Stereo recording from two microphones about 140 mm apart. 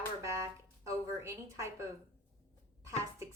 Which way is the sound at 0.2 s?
20° right (ahead or behind).